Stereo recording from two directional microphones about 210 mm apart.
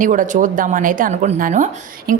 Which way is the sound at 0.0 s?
40° right (ahead or behind).